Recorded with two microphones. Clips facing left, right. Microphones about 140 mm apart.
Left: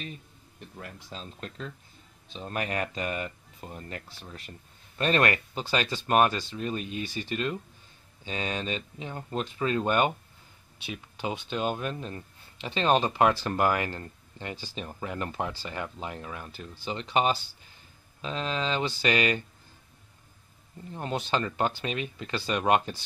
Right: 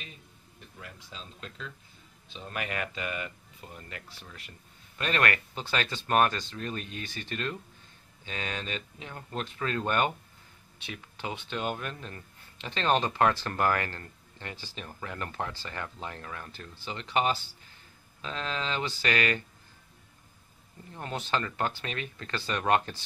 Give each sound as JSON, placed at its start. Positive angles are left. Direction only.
{"t": 0.7, "sound": "speech", "side_deg": 45}
{"t": 2.3, "sound": "speech", "side_deg": 35}
{"t": 20.9, "sound": "speech", "side_deg": 20}